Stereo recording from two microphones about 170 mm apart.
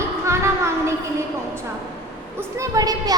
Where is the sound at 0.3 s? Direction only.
15° right (ahead or behind).